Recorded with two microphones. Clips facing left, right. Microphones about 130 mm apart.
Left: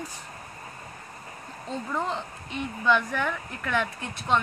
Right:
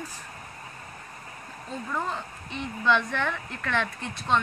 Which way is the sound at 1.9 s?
15° left (ahead or behind).